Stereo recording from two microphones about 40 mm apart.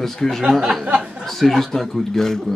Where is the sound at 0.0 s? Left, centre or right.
Centre.